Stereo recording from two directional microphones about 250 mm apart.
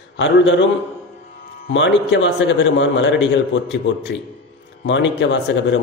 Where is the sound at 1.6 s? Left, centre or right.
Left.